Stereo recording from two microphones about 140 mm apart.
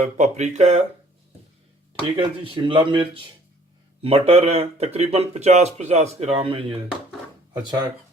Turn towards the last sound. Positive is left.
turn(degrees=-30)  # may be behind; listen again after turning